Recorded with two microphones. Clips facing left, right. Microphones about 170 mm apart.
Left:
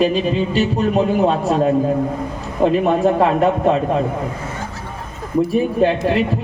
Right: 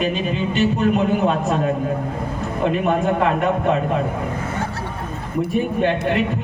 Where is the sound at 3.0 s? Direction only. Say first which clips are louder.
Left 4 dB; 35° left (ahead or behind).